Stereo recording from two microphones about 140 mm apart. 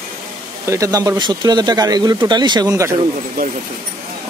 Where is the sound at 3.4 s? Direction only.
90° right.